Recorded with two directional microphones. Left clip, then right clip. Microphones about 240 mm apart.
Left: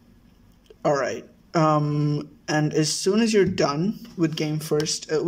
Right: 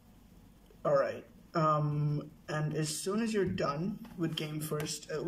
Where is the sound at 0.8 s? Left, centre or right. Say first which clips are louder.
Left 7 dB; left.